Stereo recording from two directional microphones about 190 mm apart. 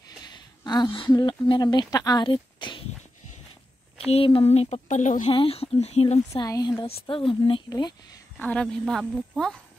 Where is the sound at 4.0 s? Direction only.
30° left (ahead or behind).